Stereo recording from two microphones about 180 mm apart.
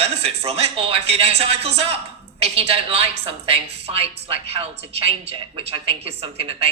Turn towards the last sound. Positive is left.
turn(degrees=-30)  # may be behind; listen again after turning